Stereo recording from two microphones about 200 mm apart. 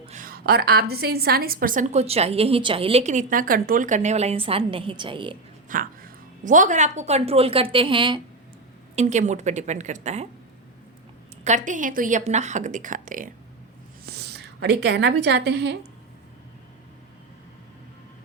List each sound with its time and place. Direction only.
0.0 s a woman's voice: 40° right (ahead or behind)
5.6 s speech: 45° right (ahead or behind); by 8.2 s 25° right (ahead or behind)
9.0 s a woman's voice: 35° right (ahead or behind)
11.4 s a woman's voice: 40° right (ahead or behind)
14.0 s a woman's voice: 55° right (ahead or behind)